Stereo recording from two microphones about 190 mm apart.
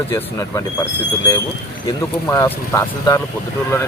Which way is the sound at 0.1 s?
15° left (ahead or behind).